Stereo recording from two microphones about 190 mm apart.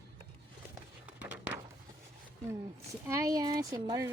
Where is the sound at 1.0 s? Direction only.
10° right (ahead or behind).